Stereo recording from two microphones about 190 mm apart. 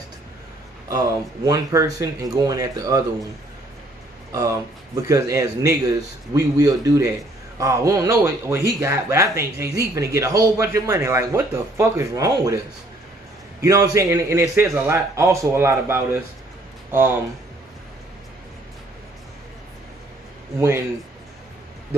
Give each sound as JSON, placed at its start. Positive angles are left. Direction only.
{"t": 0.8, "sound": "a man's voice", "side_deg": -20}
{"t": 4.3, "sound": "a man's voice", "side_deg": -20}
{"t": 13.6, "sound": "a man's voice", "side_deg": -15}